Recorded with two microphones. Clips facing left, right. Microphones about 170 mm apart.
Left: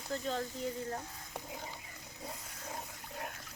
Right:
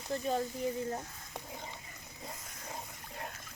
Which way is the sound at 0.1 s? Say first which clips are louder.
Right 3 dB; 15° right (ahead or behind).